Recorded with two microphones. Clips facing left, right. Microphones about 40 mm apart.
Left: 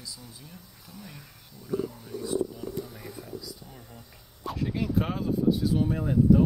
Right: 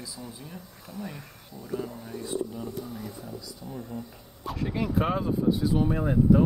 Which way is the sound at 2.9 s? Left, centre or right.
Centre.